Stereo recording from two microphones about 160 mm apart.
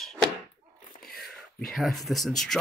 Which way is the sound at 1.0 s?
Centre (ahead or behind).